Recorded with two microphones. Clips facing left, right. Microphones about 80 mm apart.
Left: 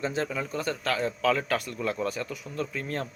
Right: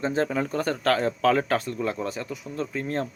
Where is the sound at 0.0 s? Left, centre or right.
Right.